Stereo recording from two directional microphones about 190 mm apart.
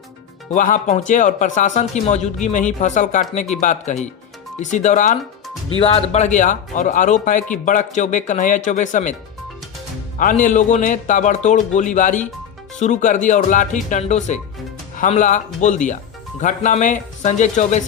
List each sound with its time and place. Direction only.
0.5 s a man's voice: 40° left (ahead or behind)
5.8 s a man's voice: 30° left (ahead or behind)
10.2 s a man's voice: 45° left (ahead or behind)